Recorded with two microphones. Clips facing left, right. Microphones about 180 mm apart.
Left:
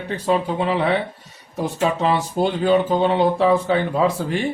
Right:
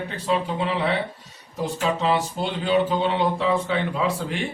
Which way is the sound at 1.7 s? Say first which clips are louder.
Left 3 dB; 50° left (ahead or behind).